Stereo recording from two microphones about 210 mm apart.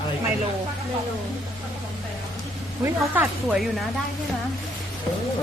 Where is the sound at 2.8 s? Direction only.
10° right (ahead or behind).